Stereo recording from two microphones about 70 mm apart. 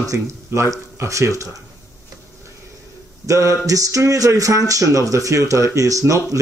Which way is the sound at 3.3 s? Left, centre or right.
Right.